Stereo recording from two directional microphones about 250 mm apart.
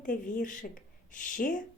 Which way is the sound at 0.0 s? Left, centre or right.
Left.